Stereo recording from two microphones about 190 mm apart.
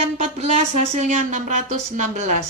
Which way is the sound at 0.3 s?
35° right (ahead or behind).